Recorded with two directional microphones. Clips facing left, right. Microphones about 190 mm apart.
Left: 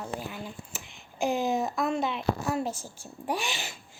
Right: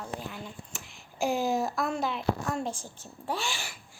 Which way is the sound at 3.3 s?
15° left (ahead or behind).